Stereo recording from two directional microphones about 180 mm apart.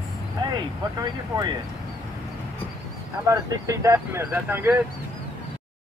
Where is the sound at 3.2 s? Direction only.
15° right (ahead or behind).